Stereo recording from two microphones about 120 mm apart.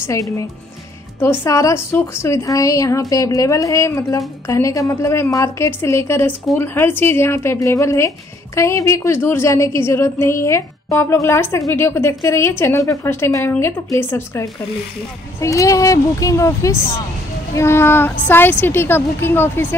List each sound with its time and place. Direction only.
0.0 s a woman's voice: 25° left (ahead or behind)
15.4 s a woman's voice: 25° left (ahead or behind)